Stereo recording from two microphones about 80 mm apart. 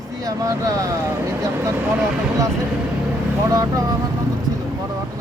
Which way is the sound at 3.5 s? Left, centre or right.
Right.